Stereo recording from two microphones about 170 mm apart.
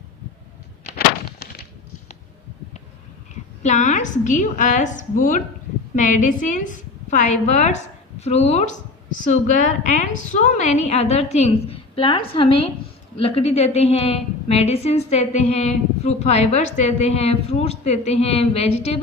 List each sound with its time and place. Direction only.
3.6 s a woman's voice: 45° left (ahead or behind)